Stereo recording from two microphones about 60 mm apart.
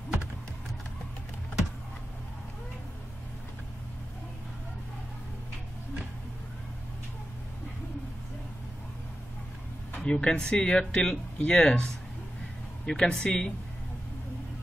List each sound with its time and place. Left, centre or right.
9.9 s speech: centre